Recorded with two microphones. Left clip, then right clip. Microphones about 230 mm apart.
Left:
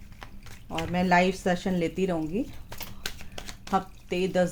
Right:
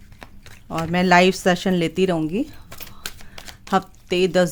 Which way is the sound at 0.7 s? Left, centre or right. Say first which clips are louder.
Right 7 dB; right.